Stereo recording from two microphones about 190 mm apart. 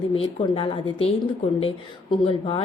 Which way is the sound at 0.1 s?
30° left (ahead or behind).